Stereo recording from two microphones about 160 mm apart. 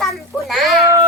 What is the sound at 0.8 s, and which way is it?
Baby cry, 20° right (ahead or behind).